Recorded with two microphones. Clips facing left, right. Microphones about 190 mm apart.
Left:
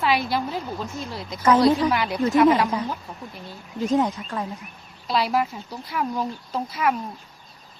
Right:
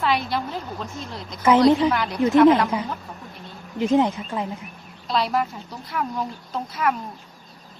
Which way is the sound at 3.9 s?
25° right (ahead or behind).